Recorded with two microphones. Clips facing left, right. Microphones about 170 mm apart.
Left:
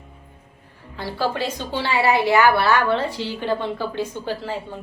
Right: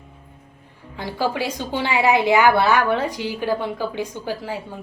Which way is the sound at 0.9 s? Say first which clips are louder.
Right 1 dB; 15° right (ahead or behind).